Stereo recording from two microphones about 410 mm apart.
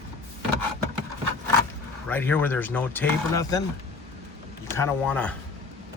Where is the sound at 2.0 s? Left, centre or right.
Centre.